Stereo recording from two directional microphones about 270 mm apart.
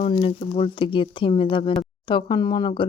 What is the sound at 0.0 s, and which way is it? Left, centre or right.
Speech, left.